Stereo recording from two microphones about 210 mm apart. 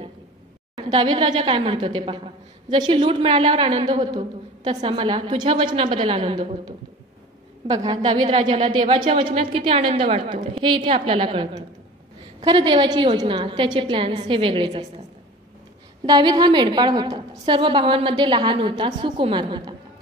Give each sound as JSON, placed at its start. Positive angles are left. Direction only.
{"t": 0.8, "sound": "a woman's voice", "side_deg": -20}
{"t": 16.1, "sound": "a woman's voice", "side_deg": -20}